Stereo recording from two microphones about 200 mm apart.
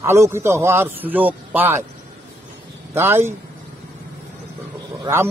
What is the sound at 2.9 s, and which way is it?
Speech, 10° right (ahead or behind).